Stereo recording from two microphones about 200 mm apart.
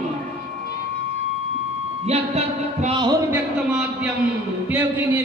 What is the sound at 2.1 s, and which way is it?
Speech, 30° right (ahead or behind).